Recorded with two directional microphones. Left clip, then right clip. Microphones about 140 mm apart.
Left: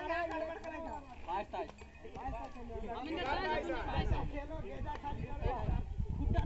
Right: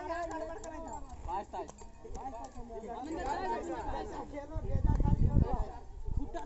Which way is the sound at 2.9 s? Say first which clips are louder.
Even; 50° right (ahead or behind).